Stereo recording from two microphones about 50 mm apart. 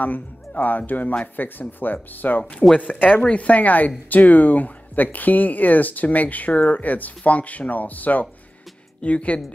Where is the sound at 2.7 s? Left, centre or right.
Left.